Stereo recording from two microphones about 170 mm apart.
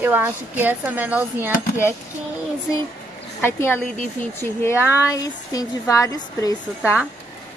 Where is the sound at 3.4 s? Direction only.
15° left (ahead or behind).